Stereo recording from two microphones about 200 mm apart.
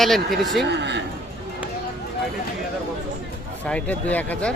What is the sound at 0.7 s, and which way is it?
Speech, 60° right (ahead or behind).